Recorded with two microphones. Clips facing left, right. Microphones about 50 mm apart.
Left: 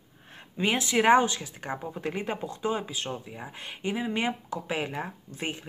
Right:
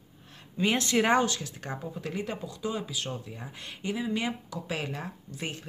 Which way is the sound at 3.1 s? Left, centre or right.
Left.